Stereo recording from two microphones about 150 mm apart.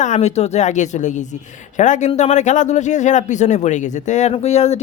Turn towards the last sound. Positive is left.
turn(degrees=45)  # may be behind; listen again after turning